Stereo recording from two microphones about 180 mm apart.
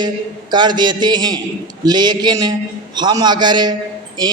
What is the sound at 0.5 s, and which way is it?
A man's voice, 25° right (ahead or behind).